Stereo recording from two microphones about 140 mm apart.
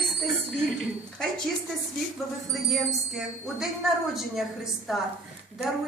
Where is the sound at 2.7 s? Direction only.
5° right (ahead or behind).